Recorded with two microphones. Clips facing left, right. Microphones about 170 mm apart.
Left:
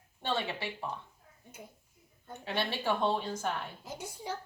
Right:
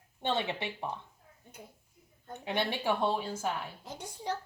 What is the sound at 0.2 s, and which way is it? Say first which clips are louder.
Speech: right 2 dB; 20° right (ahead or behind).